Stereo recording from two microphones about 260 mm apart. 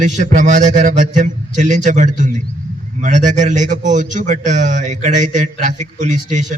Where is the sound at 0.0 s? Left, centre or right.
Right.